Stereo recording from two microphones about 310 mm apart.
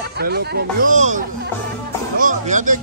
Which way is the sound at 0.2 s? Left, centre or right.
Right.